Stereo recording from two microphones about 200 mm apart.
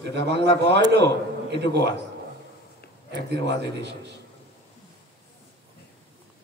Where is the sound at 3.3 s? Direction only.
60° right (ahead or behind).